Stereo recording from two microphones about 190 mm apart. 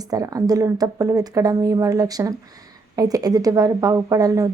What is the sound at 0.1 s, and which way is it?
Speech, 20° right (ahead or behind).